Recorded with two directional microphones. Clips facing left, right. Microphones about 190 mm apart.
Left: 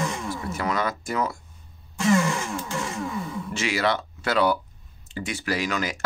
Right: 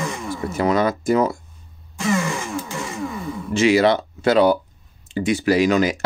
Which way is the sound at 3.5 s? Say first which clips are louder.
Right 10 dB; 20° right (ahead or behind).